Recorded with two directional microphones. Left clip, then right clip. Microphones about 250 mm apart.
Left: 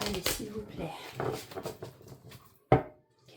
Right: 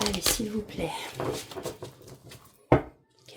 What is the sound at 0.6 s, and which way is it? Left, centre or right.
Speech, right.